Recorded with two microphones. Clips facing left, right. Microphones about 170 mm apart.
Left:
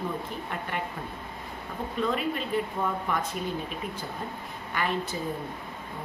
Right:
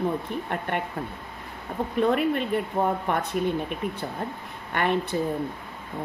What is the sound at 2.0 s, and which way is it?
Speech, 60° right (ahead or behind).